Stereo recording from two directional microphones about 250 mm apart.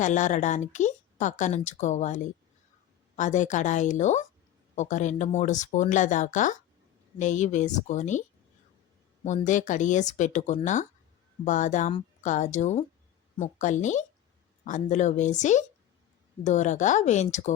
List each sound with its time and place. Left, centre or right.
0.0 s speech: left
9.2 s speech: left